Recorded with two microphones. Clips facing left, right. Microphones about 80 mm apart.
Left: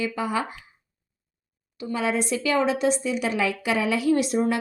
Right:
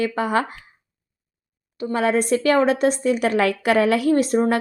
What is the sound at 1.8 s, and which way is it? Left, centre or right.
A woman's voice, right.